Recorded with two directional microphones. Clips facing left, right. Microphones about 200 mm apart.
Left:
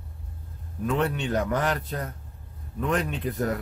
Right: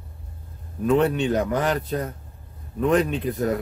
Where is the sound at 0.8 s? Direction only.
20° right (ahead or behind).